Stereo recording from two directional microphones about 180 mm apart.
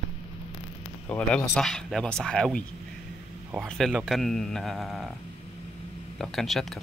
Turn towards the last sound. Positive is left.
turn(degrees=0)  # may be behind; listen again after turning